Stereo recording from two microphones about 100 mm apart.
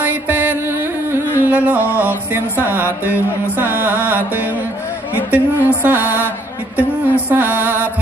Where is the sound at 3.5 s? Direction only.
15° right (ahead or behind).